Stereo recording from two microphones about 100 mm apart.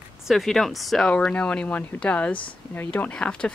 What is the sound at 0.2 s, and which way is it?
Speech, centre (ahead or behind).